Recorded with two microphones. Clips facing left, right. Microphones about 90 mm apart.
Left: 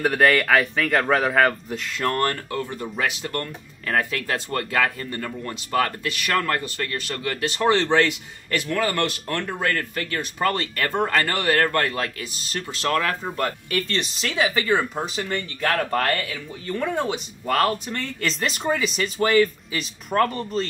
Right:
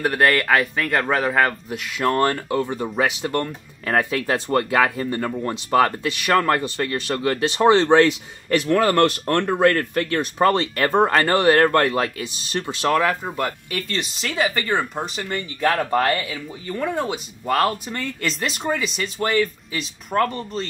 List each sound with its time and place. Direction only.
0.0 s a man's voice: centre (ahead or behind); by 12.9 s 20° right (ahead or behind)
12.9 s speech: 10° right (ahead or behind)